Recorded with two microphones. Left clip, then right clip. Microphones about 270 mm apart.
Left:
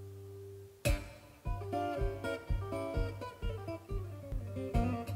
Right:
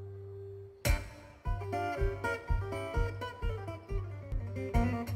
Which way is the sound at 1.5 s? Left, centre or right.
Right.